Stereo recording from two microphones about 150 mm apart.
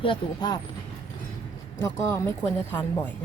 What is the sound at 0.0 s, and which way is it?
Speech, 30° left (ahead or behind).